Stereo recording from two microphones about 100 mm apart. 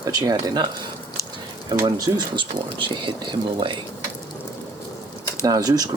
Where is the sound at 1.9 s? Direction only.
40° right (ahead or behind).